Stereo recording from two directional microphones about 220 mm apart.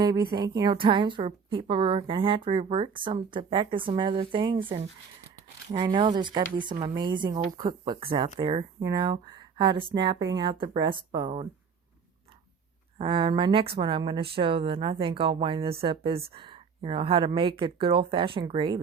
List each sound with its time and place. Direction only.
0.0 s a woman's voice: 15° right (ahead or behind)
9.1 s a sound: 20° right (ahead or behind)
9.7 s a woman's voice: 20° right (ahead or behind)
13.0 s a woman's voice: 20° right (ahead or behind)